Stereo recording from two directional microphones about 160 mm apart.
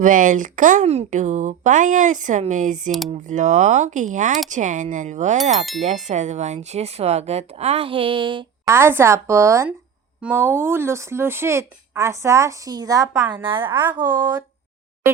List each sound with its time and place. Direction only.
0.0 s speech: 55° right (ahead or behind); by 8.4 s 30° right (ahead or behind)
8.6 s speech: 15° right (ahead or behind)